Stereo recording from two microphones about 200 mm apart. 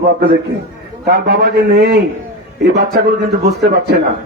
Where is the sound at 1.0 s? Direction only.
50° right (ahead or behind).